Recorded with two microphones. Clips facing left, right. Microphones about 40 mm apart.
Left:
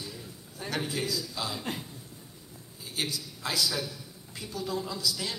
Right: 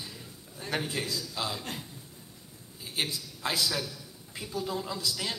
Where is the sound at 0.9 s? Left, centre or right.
Centre.